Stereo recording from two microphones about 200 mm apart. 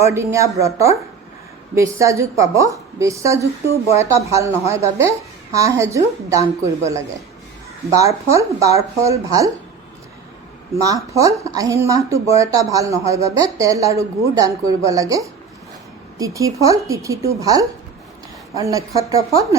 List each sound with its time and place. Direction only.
0.0 s speech: 15° right (ahead or behind)
10.8 s speech: 15° right (ahead or behind)